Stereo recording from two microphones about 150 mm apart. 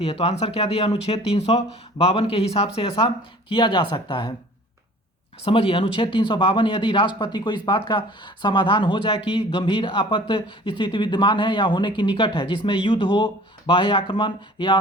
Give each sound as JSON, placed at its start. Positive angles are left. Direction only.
{"t": 0.0, "sound": "speech", "side_deg": 45}
{"t": 3.5, "sound": "speech", "side_deg": 30}
{"t": 5.5, "sound": "speech", "side_deg": 35}